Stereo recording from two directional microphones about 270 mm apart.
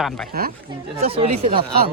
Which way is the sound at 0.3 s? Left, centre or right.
Right.